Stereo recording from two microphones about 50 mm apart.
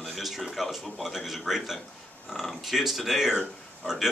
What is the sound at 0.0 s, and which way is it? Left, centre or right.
A man's voice, centre.